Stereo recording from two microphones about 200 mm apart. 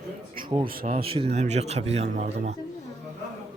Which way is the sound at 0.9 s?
30° right (ahead or behind).